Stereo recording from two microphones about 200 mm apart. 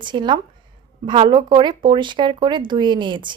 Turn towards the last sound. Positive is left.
turn(degrees=-25)  # may be behind; listen again after turning